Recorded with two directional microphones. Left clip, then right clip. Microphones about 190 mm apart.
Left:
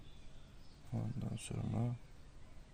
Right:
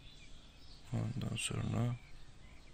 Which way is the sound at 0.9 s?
10° right (ahead or behind).